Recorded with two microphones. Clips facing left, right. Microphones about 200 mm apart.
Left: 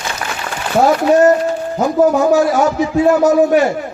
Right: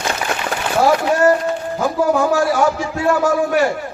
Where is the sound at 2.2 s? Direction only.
20° left (ahead or behind).